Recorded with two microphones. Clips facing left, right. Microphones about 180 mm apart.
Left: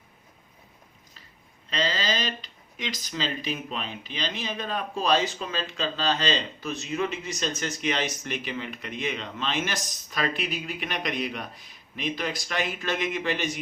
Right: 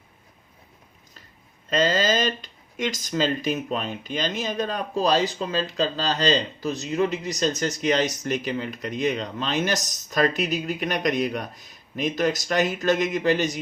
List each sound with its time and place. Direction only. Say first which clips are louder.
1.7 s speech: right 7 dB; 45° right (ahead or behind)